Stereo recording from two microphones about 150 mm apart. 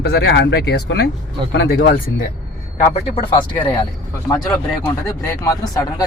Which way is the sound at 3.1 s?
35° left (ahead or behind).